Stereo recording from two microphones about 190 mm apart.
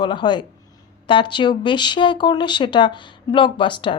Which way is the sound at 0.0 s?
25° left (ahead or behind).